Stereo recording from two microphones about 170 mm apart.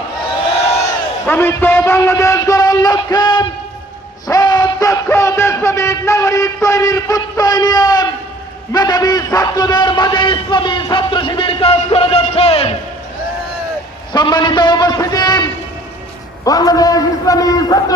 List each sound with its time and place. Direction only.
1.3 s a man's voice: 15° left (ahead or behind); by 12.7 s 35° left (ahead or behind)
14.1 s a man's voice: 25° left (ahead or behind)